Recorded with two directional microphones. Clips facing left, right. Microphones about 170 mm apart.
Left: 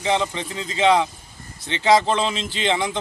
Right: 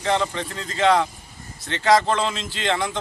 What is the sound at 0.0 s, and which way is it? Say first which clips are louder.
A man's voice: even; 15° left (ahead or behind).